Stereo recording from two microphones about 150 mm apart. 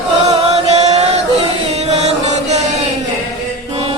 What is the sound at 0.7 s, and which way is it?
Chant, 45° right (ahead or behind).